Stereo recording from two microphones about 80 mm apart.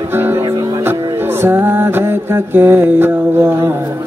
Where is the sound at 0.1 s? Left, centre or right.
Right.